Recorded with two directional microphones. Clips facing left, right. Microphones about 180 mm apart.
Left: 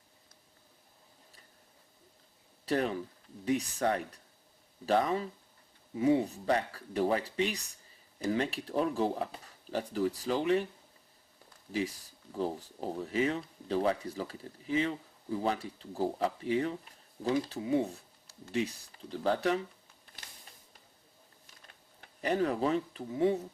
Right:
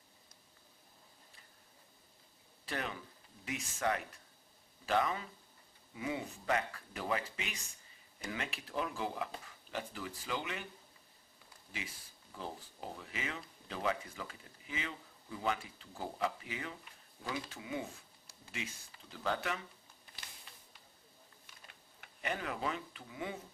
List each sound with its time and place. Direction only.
2.6 s speech: 35° left (ahead or behind)
11.7 s speech: 35° left (ahead or behind)
22.0 s speech: 35° left (ahead or behind)